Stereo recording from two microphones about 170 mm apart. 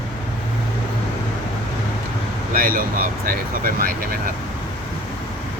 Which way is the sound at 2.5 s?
55° right (ahead or behind).